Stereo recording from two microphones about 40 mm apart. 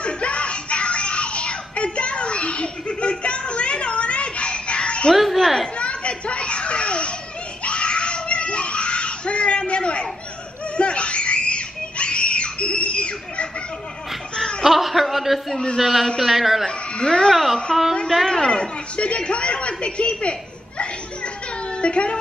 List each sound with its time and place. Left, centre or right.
0.0 s music: left
5.1 s speech: centre
5.8 s children playing: left
7.6 s screaming: left
14.3 s laughter: centre
14.6 s a sound: centre
15.8 s speech: centre
16.9 s speech: left
17.7 s a woman's voice: centre
18.5 s speech: left